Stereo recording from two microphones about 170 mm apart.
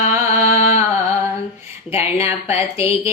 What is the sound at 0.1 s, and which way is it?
Music, 15° right (ahead or behind).